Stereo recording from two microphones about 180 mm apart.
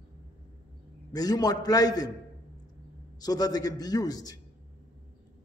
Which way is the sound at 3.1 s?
20° left (ahead or behind).